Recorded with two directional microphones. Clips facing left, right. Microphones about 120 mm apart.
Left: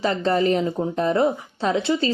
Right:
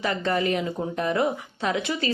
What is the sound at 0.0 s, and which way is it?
A woman's voice, 30° left (ahead or behind).